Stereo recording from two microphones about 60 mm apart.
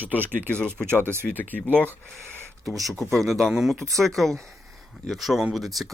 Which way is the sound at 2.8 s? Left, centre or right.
Centre.